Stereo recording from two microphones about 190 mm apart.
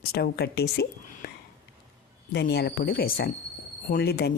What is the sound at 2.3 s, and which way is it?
Speech, 60° left (ahead or behind).